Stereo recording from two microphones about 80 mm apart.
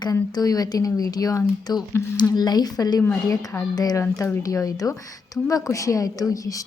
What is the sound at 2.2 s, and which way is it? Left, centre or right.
Speech, left.